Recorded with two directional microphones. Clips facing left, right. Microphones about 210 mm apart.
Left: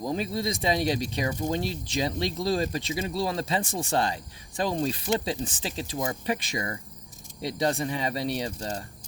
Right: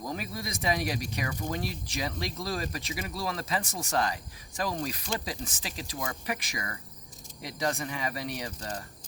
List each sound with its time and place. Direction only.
0.0 s speech: 25° left (ahead or behind)